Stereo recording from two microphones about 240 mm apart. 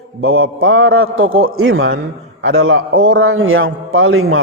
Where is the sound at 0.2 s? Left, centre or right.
Right.